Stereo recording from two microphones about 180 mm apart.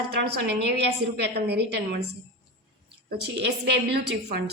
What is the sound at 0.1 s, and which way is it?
A woman's voice, 65° right (ahead or behind).